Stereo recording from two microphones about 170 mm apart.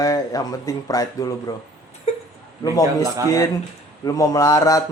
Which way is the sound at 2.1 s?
40° left (ahead or behind).